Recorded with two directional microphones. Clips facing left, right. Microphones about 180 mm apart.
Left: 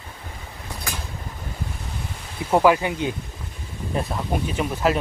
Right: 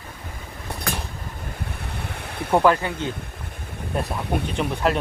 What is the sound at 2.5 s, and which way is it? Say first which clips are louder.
Speech: left 1 dB; 5° left (ahead or behind).